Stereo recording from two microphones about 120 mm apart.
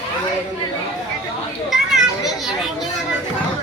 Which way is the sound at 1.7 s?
5° right (ahead or behind).